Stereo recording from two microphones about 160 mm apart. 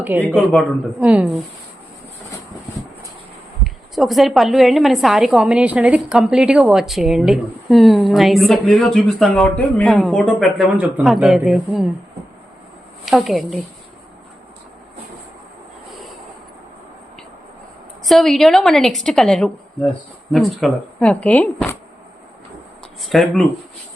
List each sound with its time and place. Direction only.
0.0 s a woman's voice: 10° right (ahead or behind)
3.6 s a woman's voice: centre (ahead or behind)
13.1 s a woman's voice: centre (ahead or behind)
18.0 s a woman's voice: centre (ahead or behind)
23.0 s a woman's voice: centre (ahead or behind)